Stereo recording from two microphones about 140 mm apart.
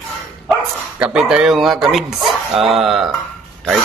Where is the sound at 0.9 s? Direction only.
5° right (ahead or behind).